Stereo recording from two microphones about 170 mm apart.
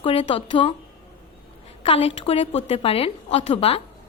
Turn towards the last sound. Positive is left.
turn(degrees=35)  # may be behind; listen again after turning